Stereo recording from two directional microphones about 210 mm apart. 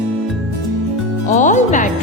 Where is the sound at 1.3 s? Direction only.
35° left (ahead or behind).